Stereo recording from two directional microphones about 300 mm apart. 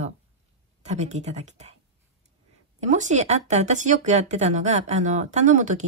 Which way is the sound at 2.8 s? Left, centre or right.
Right.